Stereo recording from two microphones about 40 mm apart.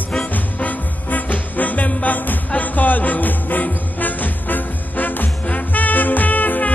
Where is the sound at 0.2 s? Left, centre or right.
Left.